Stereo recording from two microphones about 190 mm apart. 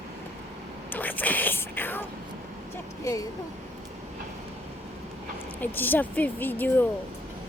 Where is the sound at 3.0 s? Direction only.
20° left (ahead or behind).